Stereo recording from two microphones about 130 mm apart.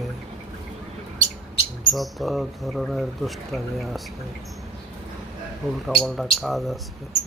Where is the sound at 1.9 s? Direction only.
Centre (ahead or behind).